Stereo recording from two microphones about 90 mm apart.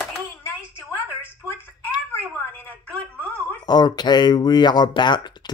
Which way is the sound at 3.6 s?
50° left (ahead or behind).